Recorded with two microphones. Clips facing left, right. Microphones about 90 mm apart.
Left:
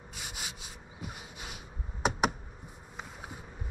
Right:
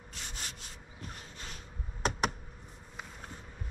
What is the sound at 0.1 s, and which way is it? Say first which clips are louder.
Rub: left 2 dB; 10° left (ahead or behind).